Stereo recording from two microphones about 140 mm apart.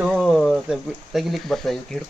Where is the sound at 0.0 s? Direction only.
5° right (ahead or behind).